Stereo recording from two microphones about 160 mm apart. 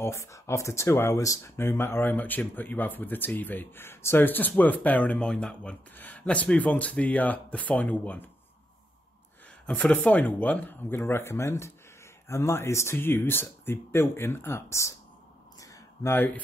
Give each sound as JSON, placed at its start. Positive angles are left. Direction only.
{"t": 0.0, "sound": "speech", "side_deg": 20}
{"t": 9.7, "sound": "speech", "side_deg": 5}
{"t": 15.6, "sound": "a sound", "side_deg": 20}